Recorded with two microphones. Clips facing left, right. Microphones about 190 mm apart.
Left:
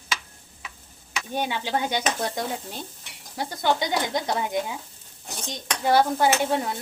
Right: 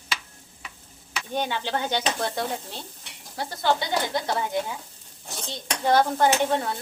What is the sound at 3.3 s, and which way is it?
Speech, 15° left (ahead or behind).